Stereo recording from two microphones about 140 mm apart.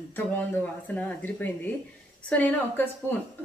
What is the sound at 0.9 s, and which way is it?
Dishes, 10° left (ahead or behind).